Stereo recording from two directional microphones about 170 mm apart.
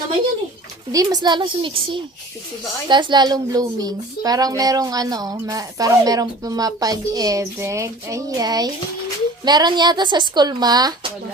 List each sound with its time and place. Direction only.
0.9 s a woman's voice: 25° right (ahead or behind)
2.9 s a woman's voice: 25° right (ahead or behind)